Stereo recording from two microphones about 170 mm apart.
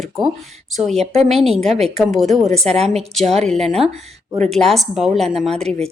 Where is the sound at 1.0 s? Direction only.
40° right (ahead or behind).